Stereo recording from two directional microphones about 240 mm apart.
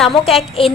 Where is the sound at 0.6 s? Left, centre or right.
Left.